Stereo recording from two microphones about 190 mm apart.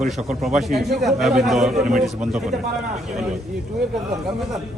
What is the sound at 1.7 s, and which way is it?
Speech, 40° right (ahead or behind).